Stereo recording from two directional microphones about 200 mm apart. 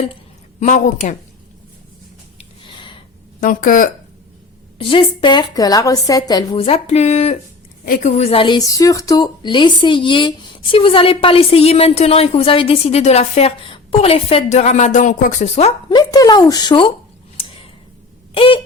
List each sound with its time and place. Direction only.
0.6 s a woman's voice: 35° left (ahead or behind)
2.6 s a sound: 25° left (ahead or behind)
3.4 s speech: 45° left (ahead or behind)
4.8 s a woman's voice: 25° left (ahead or behind)
16.0 s a woman's voice: 20° left (ahead or behind)
17.4 s a sound: 25° left (ahead or behind)
18.3 s a woman's voice: 25° left (ahead or behind)